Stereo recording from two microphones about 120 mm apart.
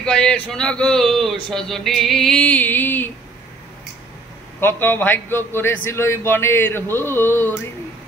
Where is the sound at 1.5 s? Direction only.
5° left (ahead or behind).